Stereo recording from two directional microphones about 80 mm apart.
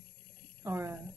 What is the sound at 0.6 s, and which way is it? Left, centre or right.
Speech, right.